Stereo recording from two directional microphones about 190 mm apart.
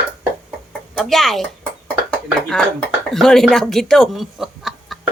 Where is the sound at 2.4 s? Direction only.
Centre (ahead or behind).